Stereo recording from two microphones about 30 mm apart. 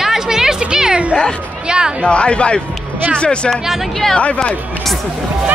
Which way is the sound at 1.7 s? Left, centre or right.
Right.